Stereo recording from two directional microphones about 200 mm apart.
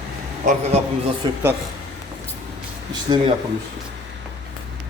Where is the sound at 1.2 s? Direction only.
20° right (ahead or behind).